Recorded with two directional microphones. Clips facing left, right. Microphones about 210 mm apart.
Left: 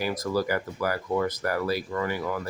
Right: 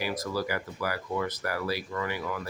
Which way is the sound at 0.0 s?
45° left (ahead or behind).